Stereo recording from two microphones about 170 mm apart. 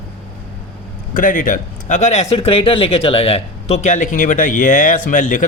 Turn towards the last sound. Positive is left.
turn(degrees=50)  # may be behind; listen again after turning